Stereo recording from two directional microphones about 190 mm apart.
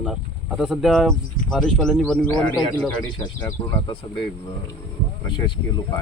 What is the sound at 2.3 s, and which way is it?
Speech, 20° left (ahead or behind).